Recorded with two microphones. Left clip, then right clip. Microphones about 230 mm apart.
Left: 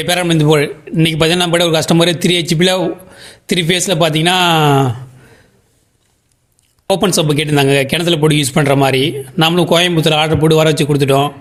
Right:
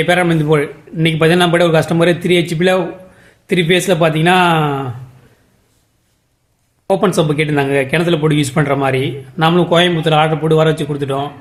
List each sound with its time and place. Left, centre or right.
0.0 s speech: left
6.9 s speech: left